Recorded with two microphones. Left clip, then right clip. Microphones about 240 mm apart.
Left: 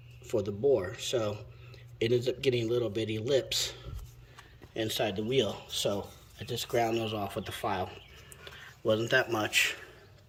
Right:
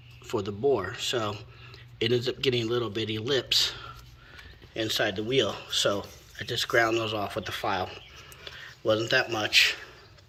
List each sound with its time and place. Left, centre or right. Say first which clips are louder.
0.3 s a man's voice: right 1 dB; centre